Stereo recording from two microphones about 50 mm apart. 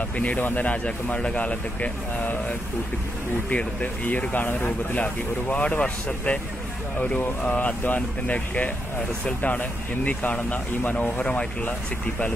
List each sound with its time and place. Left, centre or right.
0.2 s speech: left
3.4 s speech: left
7.2 s speech: left